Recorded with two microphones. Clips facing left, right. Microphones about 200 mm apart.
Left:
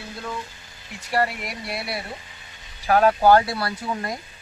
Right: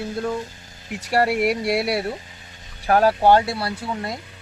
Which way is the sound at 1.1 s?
70° right (ahead or behind).